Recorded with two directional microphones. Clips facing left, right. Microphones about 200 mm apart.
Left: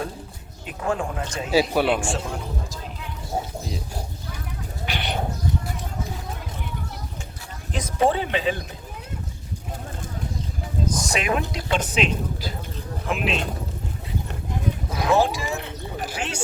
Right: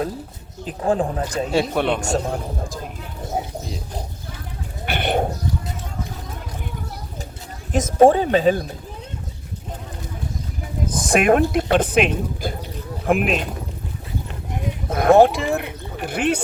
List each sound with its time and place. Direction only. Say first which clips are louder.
0.6 s speech: right 6 dB; 35° right (ahead or behind)
1.7 s a man's voice: even; 5° left (ahead or behind)
2.0 s speech: right 5 dB; 40° right (ahead or behind)
4.9 s speech: right 8 dB; 50° right (ahead or behind)
7.7 s speech: right 8 dB; 45° right (ahead or behind)
10.8 s a sound: right 9 dB; 55° right (ahead or behind)
11.5 s speech: right 7 dB; 55° right (ahead or behind)
14.8 s speech: right 8 dB; 55° right (ahead or behind)